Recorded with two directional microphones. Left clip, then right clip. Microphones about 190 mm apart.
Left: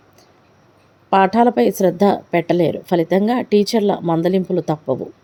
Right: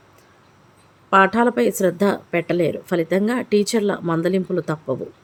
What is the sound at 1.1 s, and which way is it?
A woman's voice, 10° left (ahead or behind).